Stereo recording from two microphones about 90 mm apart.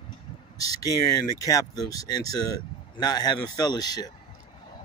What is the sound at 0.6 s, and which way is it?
Speech, 45° left (ahead or behind).